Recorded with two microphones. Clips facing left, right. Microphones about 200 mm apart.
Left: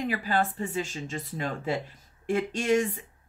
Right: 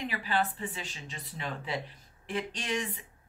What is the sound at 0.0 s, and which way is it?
Speech, 45° left (ahead or behind).